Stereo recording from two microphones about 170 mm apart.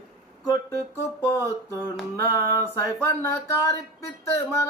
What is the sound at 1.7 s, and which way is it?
Speech, 10° left (ahead or behind).